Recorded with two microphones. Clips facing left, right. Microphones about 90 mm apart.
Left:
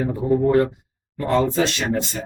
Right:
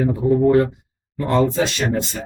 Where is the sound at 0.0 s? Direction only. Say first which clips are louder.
Right 3 dB; centre (ahead or behind).